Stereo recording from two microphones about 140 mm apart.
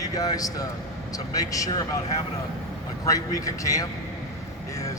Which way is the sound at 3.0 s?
25° left (ahead or behind).